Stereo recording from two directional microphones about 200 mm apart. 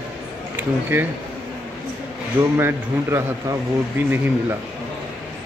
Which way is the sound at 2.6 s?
10° right (ahead or behind).